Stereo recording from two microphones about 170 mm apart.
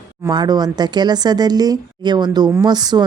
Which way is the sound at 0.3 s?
25° right (ahead or behind).